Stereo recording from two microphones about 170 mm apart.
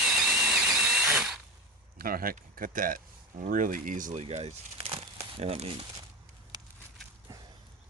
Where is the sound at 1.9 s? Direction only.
60° right (ahead or behind); by 5.9 s 35° right (ahead or behind).